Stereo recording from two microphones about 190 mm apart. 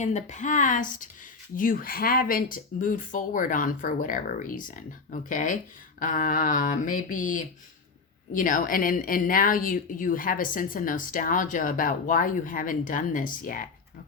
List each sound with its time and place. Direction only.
0.0 s speech: 40° left (ahead or behind)